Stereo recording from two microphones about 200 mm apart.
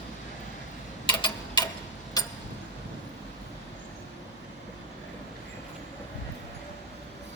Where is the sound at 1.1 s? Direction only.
25° left (ahead or behind).